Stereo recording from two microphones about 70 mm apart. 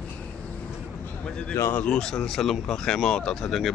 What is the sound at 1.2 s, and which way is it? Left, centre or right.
A man's voice, centre.